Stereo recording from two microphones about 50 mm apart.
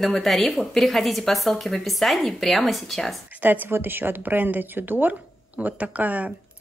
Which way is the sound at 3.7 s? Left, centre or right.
Right.